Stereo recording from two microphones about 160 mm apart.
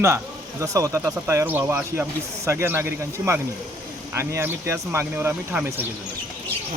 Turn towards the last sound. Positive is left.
turn(degrees=-15)  # may be behind; listen again after turning